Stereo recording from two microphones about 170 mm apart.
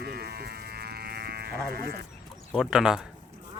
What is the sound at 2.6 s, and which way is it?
Speech, 5° right (ahead or behind).